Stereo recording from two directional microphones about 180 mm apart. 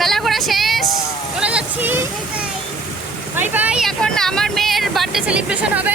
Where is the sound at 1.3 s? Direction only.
5° right (ahead or behind).